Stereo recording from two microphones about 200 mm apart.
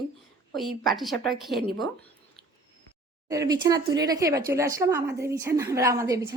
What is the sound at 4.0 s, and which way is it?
A woman's voice, 15° right (ahead or behind).